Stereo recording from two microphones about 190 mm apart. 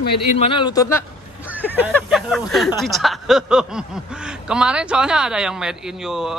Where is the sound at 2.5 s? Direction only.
Centre (ahead or behind).